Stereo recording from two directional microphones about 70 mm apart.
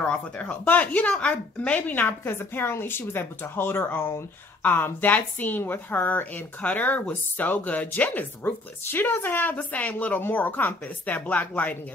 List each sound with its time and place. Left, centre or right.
0.0 s a woman's voice: left